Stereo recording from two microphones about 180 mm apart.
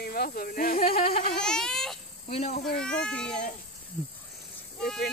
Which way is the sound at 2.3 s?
35° left (ahead or behind).